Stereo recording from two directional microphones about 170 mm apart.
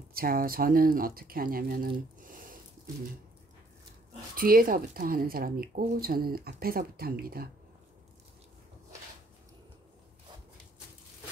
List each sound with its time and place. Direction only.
0.1 s speech: 60° right (ahead or behind)
4.4 s speech: 55° right (ahead or behind)